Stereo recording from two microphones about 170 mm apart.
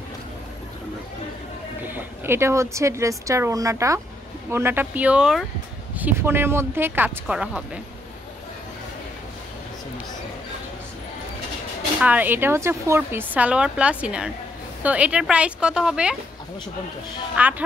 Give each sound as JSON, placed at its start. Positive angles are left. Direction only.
{"t": 1.9, "sound": "speech", "side_deg": -10}
{"t": 12.0, "sound": "speech", "side_deg": -10}
{"t": 17.4, "sound": "speech", "side_deg": -10}